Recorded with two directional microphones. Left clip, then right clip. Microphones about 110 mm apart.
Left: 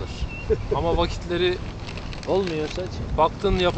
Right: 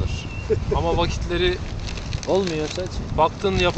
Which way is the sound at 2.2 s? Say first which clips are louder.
Right 2 dB; 30° right (ahead or behind).